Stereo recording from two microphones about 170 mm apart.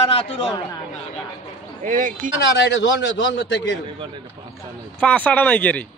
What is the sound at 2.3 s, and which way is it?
A man's voice, 90° left.